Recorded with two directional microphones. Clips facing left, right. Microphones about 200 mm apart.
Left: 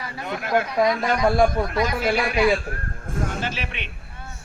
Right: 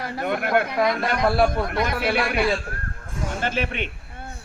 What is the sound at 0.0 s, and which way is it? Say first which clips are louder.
Speech: right 5 dB; 55° right (ahead or behind).